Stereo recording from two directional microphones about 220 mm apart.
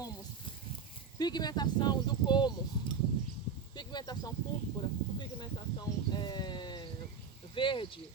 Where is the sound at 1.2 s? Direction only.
20° left (ahead or behind).